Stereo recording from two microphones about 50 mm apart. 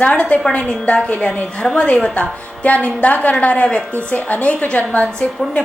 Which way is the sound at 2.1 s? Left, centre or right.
Left.